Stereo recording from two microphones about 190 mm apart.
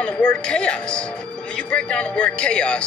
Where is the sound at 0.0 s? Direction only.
5° left (ahead or behind).